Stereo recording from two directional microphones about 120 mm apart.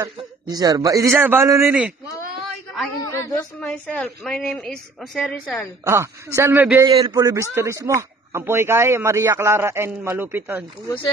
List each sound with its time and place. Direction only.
0.0 s speech: 35° right (ahead or behind)
1.1 s speech: 20° right (ahead or behind)
1.7 s speech: 10° right (ahead or behind)
3.0 s a man's voice: 25° left (ahead or behind)
3.5 s a woman's voice: 10° left (ahead or behind)
5.9 s speech: 25° right (ahead or behind)
6.9 s speech: 30° right (ahead or behind)